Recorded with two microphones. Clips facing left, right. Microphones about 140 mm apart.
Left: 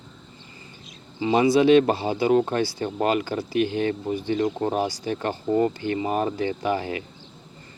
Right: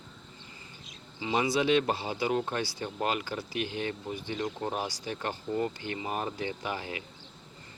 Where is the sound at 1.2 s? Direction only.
50° left (ahead or behind).